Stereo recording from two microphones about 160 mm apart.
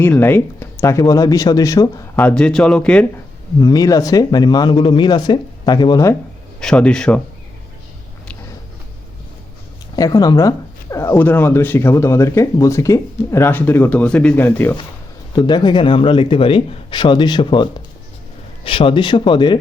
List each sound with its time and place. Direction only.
0.0 s speech: 15° left (ahead or behind)
2.1 s speech: 5° left (ahead or behind)
3.6 s speech: 25° left (ahead or behind)
6.6 s a man's voice: 5° left (ahead or behind)
9.9 s speech: 25° left (ahead or behind)
15.4 s speech: 25° left (ahead or behind)